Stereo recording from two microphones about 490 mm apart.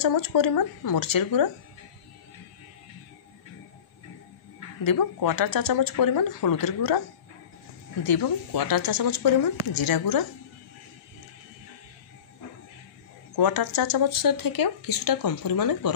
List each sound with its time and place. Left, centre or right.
0.0 s speech: left
4.8 s speech: left
8.1 s speech: left
13.4 s speech: left